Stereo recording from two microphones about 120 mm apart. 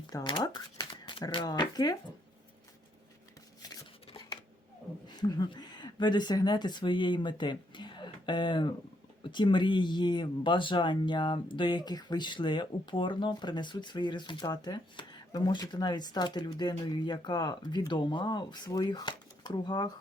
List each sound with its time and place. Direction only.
0.1 s speech: 35° left (ahead or behind)
5.0 s speech: 35° left (ahead or behind)